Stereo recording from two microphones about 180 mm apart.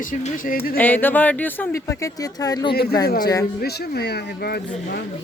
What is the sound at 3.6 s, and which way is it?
Speech, 60° left (ahead or behind).